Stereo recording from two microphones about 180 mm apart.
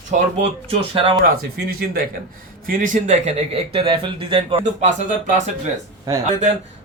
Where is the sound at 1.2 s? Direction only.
55° right (ahead or behind); by 4.6 s 30° right (ahead or behind).